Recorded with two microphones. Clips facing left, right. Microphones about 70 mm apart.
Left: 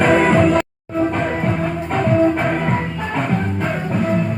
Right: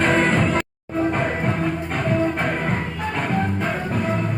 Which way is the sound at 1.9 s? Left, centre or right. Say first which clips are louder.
Left 8 dB; centre.